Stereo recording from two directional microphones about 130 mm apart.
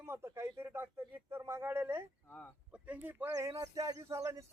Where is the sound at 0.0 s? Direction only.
20° right (ahead or behind).